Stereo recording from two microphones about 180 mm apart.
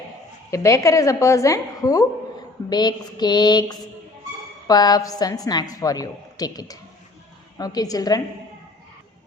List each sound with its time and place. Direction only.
0.5 s a woman's voice: 15° left (ahead or behind)